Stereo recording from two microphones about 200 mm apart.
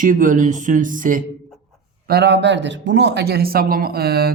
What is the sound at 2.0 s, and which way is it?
Speech, 55° right (ahead or behind).